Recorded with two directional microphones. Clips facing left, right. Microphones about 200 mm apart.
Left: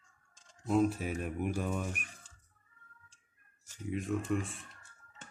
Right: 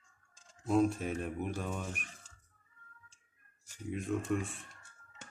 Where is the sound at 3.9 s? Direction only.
Centre (ahead or behind).